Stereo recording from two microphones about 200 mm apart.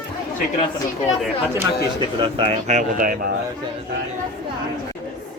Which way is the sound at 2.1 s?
25° right (ahead or behind).